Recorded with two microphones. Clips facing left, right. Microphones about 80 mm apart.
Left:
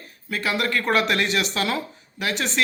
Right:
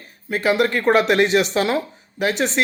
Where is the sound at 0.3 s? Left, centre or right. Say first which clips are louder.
Right 6 dB; right.